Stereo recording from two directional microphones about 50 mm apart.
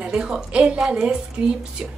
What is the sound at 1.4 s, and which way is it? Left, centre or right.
Speech, right.